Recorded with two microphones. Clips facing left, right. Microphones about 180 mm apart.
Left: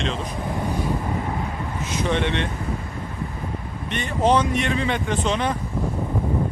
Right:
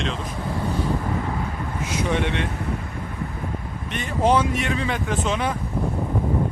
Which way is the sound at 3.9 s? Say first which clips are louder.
Even; 5° right (ahead or behind).